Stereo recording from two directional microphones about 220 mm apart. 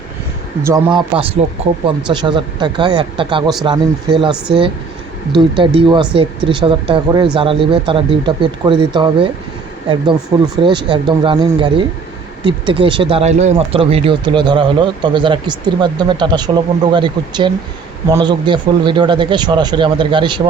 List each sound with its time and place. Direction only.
0.6 s speech: 15° right (ahead or behind)